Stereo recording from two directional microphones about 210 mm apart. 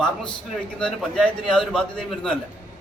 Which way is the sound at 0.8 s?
5° left (ahead or behind).